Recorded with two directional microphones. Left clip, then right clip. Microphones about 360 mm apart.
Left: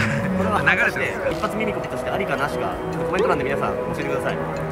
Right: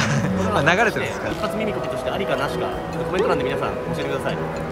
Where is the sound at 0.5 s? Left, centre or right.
Centre.